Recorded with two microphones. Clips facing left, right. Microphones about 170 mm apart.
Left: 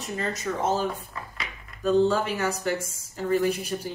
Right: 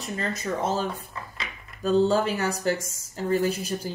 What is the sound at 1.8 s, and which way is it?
Speech, 30° right (ahead or behind).